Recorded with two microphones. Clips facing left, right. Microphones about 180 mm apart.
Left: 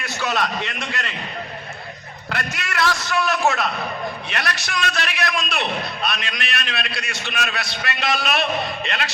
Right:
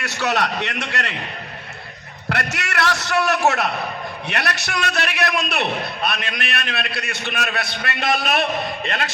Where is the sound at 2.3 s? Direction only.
70° right (ahead or behind).